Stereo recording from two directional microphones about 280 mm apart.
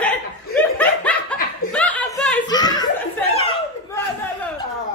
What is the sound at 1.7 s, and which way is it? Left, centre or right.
Chuckle, centre.